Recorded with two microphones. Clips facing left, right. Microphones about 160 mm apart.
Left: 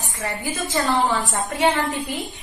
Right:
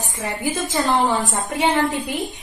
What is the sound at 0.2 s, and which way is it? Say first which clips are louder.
A woman's voice: right 3 dB; 20° right (ahead or behind).